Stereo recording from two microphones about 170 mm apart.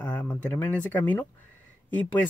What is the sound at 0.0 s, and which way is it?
Speech, 10° left (ahead or behind).